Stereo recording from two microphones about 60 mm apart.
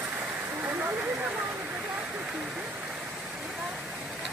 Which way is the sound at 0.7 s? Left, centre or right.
Right.